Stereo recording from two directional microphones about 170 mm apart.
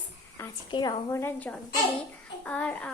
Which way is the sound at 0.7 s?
25° left (ahead or behind).